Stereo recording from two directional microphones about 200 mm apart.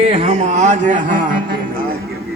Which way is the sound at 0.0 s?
30° right (ahead or behind).